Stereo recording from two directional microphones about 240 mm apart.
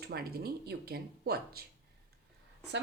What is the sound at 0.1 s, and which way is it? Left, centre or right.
Speech, right.